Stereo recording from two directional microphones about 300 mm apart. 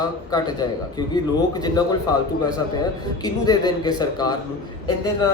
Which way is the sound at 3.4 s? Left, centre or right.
Centre.